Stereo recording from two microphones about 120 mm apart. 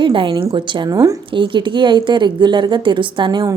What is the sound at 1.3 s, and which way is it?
A woman's voice, 45° right (ahead or behind).